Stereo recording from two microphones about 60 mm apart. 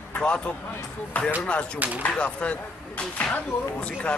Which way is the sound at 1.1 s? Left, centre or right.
Left.